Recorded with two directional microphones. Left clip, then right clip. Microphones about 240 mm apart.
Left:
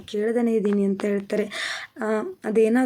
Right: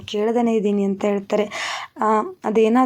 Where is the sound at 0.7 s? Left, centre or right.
Centre.